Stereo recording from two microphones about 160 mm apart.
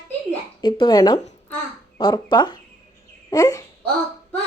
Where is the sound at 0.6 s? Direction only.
30° left (ahead or behind).